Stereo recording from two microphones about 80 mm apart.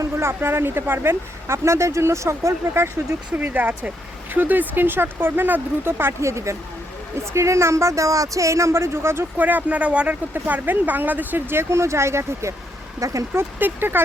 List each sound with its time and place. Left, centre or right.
0.0 s speech: right
3.3 s speech: right
13.3 s speech: right